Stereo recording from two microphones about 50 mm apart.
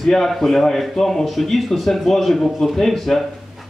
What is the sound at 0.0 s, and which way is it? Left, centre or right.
A man's voice, centre.